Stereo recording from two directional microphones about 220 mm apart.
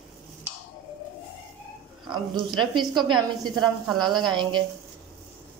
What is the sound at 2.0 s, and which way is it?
Speech, 20° right (ahead or behind).